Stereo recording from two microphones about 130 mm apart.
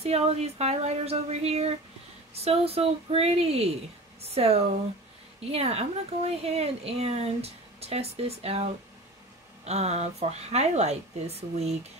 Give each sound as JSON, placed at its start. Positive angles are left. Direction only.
{"t": 0.0, "sound": "a woman's voice", "side_deg": -55}
{"t": 9.7, "sound": "speech", "side_deg": -55}